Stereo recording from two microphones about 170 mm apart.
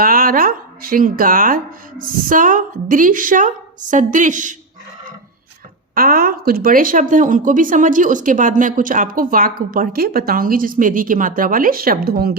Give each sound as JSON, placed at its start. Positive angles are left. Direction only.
{"t": 0.0, "sound": "speech", "side_deg": -55}
{"t": 5.9, "sound": "speech", "side_deg": -60}